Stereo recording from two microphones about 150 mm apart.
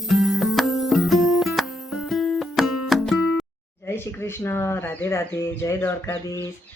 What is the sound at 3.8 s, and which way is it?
Speech, 15° left (ahead or behind).